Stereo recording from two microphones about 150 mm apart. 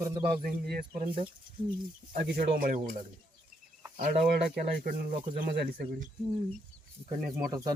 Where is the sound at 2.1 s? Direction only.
70° right (ahead or behind).